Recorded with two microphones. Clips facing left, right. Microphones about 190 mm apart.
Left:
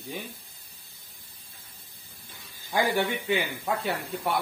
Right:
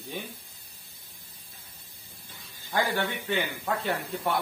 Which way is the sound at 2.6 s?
15° left (ahead or behind).